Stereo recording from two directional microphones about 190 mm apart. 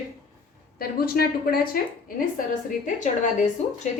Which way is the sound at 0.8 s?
50° left (ahead or behind).